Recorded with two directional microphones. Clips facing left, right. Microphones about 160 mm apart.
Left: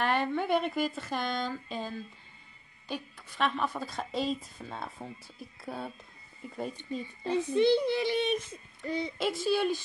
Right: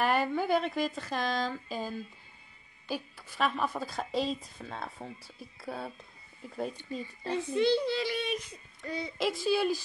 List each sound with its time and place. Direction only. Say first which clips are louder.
0.0 s a woman's voice: right 1 dB; 5° right (ahead or behind)
7.5 s a child's voice: left 2 dB; 20° left (ahead or behind)
9.2 s a woman's voice: right 1 dB; centre (ahead or behind)